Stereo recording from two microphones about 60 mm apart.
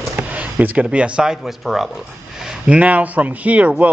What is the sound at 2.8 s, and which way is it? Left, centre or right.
Speech, right.